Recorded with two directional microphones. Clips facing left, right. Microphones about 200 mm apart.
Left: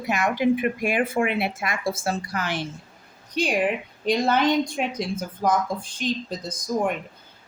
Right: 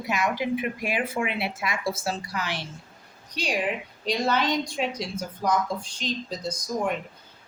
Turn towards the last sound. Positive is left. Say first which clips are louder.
# left 3 dB
turn(degrees=50)  # may be behind; listen again after turning